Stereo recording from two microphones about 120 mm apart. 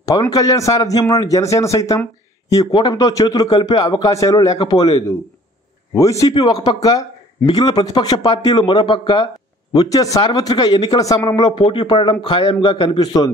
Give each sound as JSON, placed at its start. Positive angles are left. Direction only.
{"t": 0.0, "sound": "a man's voice", "side_deg": 30}